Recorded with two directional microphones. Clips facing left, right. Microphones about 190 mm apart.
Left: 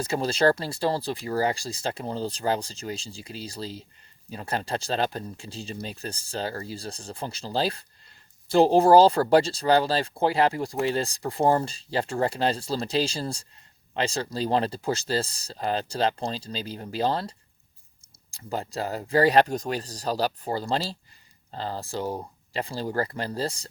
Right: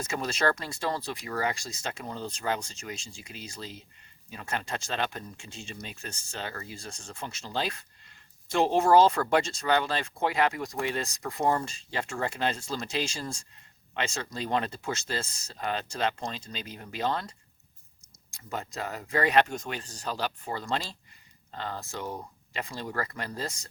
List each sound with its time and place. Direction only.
0.0 s speech: 30° left (ahead or behind)